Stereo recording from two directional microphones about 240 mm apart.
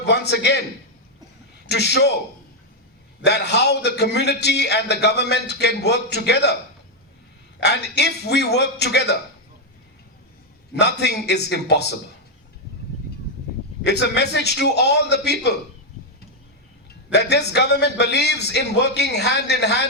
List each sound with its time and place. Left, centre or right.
0.0 s a man's voice: left
1.6 s a man's voice: left
3.2 s a man's voice: left
7.6 s a man's voice: left
10.7 s a man's voice: left
13.8 s a man's voice: left
17.1 s a man's voice: left